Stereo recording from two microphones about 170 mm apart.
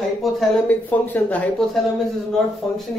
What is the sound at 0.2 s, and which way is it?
Speech, 5° left (ahead or behind).